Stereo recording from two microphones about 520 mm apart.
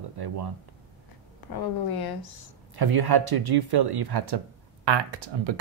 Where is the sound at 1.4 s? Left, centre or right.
Left.